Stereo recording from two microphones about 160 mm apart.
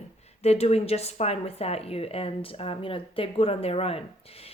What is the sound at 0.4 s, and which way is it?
A woman's voice, 40° left (ahead or behind).